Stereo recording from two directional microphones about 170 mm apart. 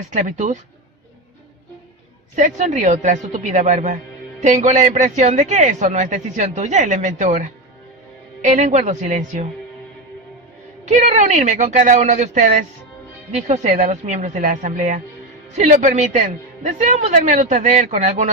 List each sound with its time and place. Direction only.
0.1 s a woman's voice: 45° right (ahead or behind)
2.3 s a woman's voice: 45° right (ahead or behind)
10.9 s a woman's voice: 45° right (ahead or behind)